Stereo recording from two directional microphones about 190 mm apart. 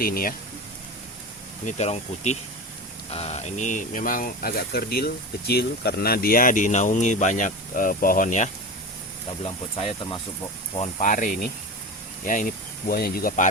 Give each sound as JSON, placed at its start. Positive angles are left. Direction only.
{"t": 0.0, "sound": "speech", "side_deg": 50}
{"t": 1.6, "sound": "speech", "side_deg": 35}
{"t": 9.4, "sound": "speech", "side_deg": 30}
{"t": 10.8, "sound": "speech", "side_deg": 40}